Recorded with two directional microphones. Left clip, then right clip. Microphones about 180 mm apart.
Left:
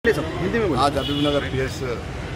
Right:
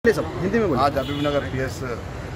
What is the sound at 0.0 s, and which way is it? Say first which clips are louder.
Speech: right 1 dB; 70° right (ahead or behind).